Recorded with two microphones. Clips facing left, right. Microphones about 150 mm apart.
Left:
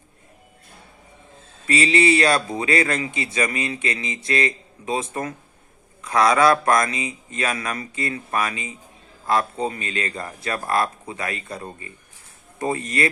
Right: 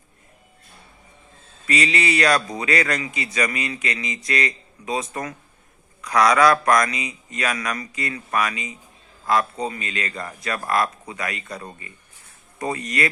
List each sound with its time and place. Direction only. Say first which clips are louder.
1.6 s speech: left 4 dB; 30° left (ahead or behind)